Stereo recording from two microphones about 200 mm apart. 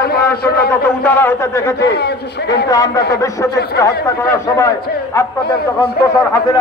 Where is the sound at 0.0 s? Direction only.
50° left (ahead or behind).